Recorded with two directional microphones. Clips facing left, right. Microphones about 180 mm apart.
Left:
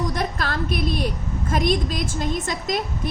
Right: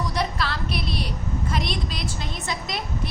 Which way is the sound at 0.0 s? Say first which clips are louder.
Left 1 dB; 50° left (ahead or behind).